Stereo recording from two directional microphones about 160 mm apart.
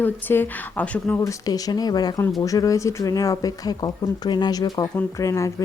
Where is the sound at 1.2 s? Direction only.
25° left (ahead or behind).